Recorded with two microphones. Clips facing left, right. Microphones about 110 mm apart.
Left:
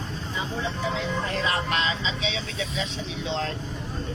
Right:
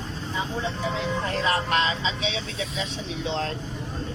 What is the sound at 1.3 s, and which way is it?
Speech, 40° right (ahead or behind).